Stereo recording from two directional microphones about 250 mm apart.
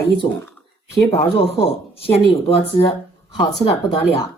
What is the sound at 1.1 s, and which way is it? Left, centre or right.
Speech, left.